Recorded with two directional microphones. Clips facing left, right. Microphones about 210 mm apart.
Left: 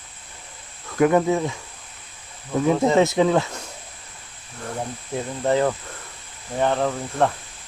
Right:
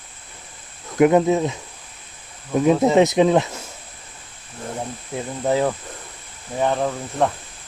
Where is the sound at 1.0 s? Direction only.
20° right (ahead or behind).